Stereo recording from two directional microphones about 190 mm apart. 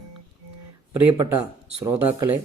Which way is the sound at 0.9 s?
15° right (ahead or behind).